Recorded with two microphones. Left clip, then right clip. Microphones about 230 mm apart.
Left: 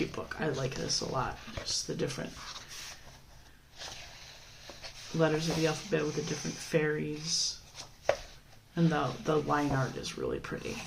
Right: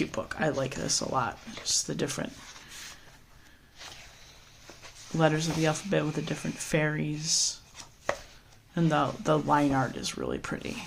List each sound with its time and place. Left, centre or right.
0.1 s speech: right
5.2 s speech: right
8.7 s speech: right